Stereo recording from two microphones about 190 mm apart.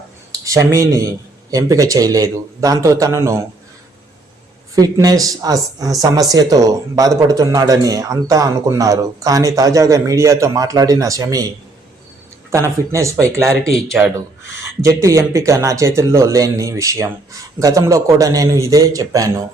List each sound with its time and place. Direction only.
0.3 s speech: 15° right (ahead or behind)
4.7 s speech: 20° right (ahead or behind)
12.5 s speech: 15° right (ahead or behind)
14.0 s speech: 5° right (ahead or behind)
14.8 s speech: 15° right (ahead or behind)